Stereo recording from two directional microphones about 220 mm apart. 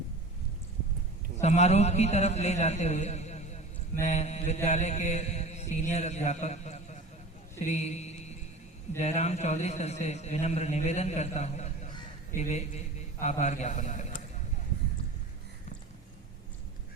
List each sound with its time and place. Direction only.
1.4 s mantra: 30° left (ahead or behind)
7.6 s a man's voice: 30° left (ahead or behind)
9.0 s mantra: 30° left (ahead or behind)